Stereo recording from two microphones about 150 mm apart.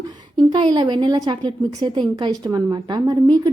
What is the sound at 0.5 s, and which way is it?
A woman's voice, 30° right (ahead or behind).